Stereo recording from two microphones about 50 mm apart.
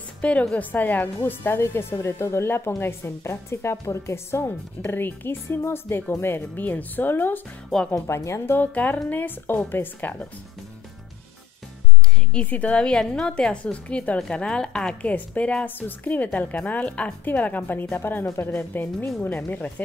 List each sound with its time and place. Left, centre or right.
0.2 s a woman's voice: left
0.6 s a woman's voice: left
1.6 s a woman's voice: left
4.5 s speech: left
6.6 s a woman's voice: left
7.9 s speech: left
8.5 s a woman's voice: left
12.4 s a woman's voice: left
12.8 s a woman's voice: centre
17.2 s a woman's voice: left